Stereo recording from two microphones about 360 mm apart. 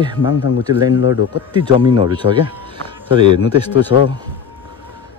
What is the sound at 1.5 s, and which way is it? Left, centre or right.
Speech, centre.